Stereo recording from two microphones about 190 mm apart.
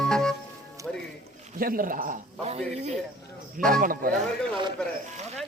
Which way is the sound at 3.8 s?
45° right (ahead or behind).